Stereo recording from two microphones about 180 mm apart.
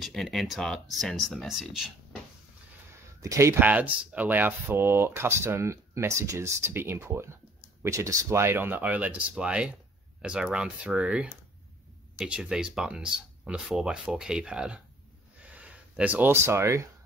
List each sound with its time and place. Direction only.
0.0 s speech: centre (ahead or behind)
3.2 s speech: 15° right (ahead or behind)
15.4 s a sound: 5° right (ahead or behind)